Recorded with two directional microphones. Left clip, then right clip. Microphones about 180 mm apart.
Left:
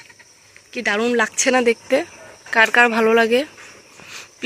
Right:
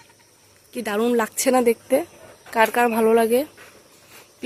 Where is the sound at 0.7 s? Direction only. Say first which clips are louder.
Left 3 dB; 10° right (ahead or behind).